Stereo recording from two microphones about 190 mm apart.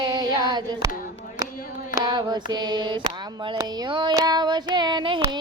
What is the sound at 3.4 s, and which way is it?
Child singing, 25° right (ahead or behind).